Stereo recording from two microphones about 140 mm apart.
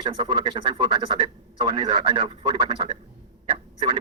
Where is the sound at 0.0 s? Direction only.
35° right (ahead or behind).